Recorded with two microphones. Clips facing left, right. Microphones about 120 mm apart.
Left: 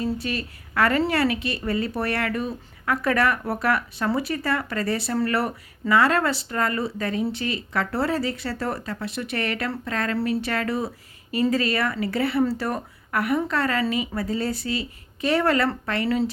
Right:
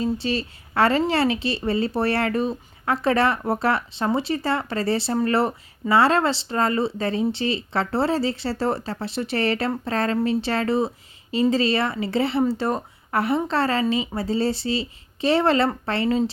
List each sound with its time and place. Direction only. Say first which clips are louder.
0.0 s a woman's voice: right 3 dB; 30° right (ahead or behind)